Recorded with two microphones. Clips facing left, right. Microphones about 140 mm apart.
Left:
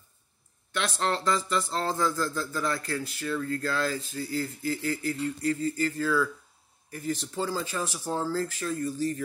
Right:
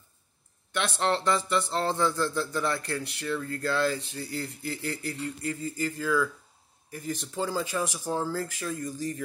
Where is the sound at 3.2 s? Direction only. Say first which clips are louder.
Left 1 dB; 20° right (ahead or behind).